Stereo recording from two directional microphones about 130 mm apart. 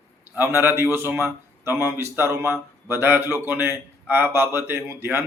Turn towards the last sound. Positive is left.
turn(degrees=-20)  # may be behind; listen again after turning